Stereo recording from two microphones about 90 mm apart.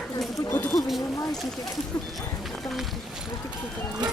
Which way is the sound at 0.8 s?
Centre (ahead or behind).